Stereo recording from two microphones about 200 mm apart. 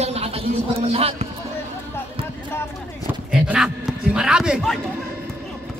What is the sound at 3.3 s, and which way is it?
A man's voice, 5° right (ahead or behind).